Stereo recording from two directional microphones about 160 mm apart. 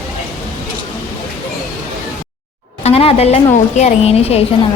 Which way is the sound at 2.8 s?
40° left (ahead or behind).